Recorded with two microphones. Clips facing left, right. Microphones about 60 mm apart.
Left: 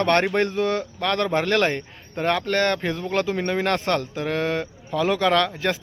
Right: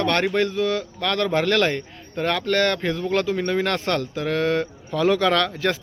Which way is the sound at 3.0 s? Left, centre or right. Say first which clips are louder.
Right 1 dB; centre.